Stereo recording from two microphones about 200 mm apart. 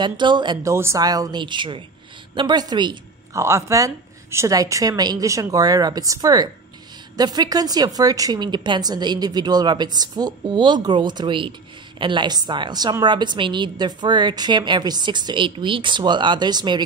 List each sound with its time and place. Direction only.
0.0 s a woman's voice: 25° right (ahead or behind)